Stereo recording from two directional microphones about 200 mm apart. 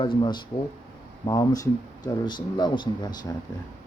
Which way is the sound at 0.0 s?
25° left (ahead or behind).